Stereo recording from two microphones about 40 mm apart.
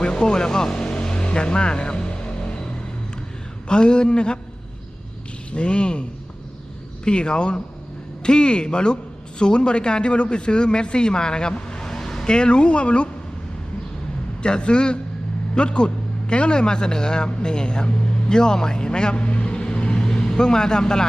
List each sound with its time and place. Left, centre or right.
0.0 s vehicle: left
3.7 s a man's voice: left
5.5 s a man's voice: left; by 12.2 s centre
12.2 s a man's voice: left
14.4 s a man's voice: left
20.0 s speech: centre